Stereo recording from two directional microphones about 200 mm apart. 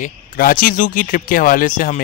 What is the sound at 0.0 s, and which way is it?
Speech, 45° left (ahead or behind).